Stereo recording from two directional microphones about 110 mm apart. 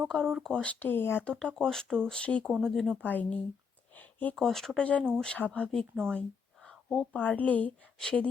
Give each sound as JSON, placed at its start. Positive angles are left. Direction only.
{"t": 0.1, "sound": "speech", "side_deg": 5}
{"t": 1.3, "sound": "speech", "side_deg": 5}
{"t": 3.0, "sound": "speech", "side_deg": 15}
{"t": 3.9, "sound": "a sound", "side_deg": 15}
{"t": 4.4, "sound": "speech", "side_deg": 5}
{"t": 6.7, "sound": "a sound", "side_deg": 5}
{"t": 7.2, "sound": "speech", "side_deg": 15}